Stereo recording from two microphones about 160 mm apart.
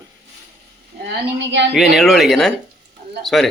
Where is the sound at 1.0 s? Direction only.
90° right.